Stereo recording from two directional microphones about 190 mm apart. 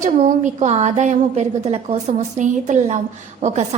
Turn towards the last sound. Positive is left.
turn(degrees=-40)  # may be behind; listen again after turning